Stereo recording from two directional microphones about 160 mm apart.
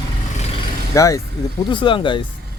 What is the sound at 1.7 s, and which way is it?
Speech, 30° left (ahead or behind).